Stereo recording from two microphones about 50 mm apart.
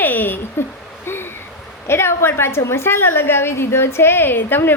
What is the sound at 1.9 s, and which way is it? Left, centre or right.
A woman's voice, left.